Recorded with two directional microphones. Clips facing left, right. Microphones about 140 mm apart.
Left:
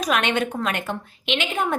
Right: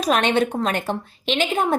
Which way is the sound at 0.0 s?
35° right (ahead or behind).